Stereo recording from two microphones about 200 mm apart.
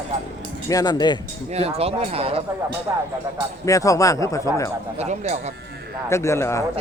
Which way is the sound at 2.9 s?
15° right (ahead or behind).